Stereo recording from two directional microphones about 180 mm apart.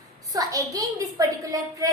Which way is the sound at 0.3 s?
20° right (ahead or behind).